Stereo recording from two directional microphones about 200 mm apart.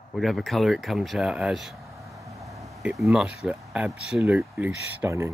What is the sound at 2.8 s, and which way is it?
Speech, centre (ahead or behind).